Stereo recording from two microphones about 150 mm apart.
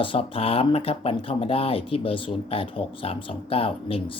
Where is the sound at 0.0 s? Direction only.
40° left (ahead or behind).